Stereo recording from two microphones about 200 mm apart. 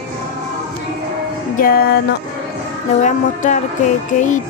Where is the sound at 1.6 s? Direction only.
50° left (ahead or behind).